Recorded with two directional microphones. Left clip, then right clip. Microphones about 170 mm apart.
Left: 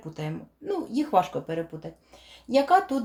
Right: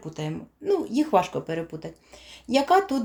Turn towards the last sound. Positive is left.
turn(degrees=-25)  # may be behind; listen again after turning